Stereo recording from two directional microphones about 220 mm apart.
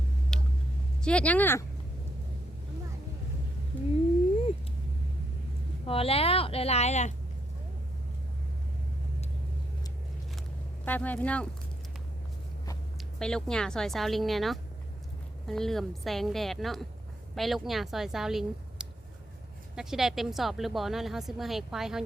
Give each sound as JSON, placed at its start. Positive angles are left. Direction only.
{"t": 0.3, "sound": "vehicle", "side_deg": 0}
{"t": 1.0, "sound": "speech", "side_deg": 5}
{"t": 5.8, "sound": "speech", "side_deg": 25}
{"t": 10.8, "sound": "speech", "side_deg": 5}
{"t": 13.0, "sound": "a woman's voice", "side_deg": 5}